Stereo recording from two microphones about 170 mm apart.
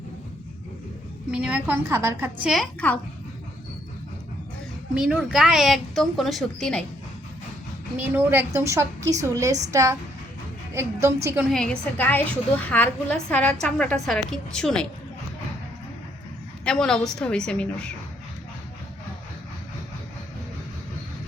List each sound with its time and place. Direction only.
1.3 s a woman's voice: 5° right (ahead or behind)
2.5 s a woman's voice: 5° left (ahead or behind)
4.9 s a woman's voice: 5° right (ahead or behind)
7.9 s a woman's voice: 10° right (ahead or behind)
10.8 s a woman's voice: 15° right (ahead or behind)
11.4 s a woman's voice: 5° left (ahead or behind)
16.6 s a woman's voice: 5° left (ahead or behind)